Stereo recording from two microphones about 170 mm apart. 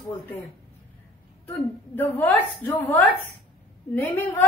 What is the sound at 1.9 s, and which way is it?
A woman's voice, 10° left (ahead or behind).